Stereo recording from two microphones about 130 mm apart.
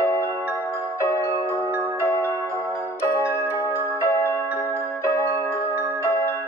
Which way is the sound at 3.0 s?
20° left (ahead or behind).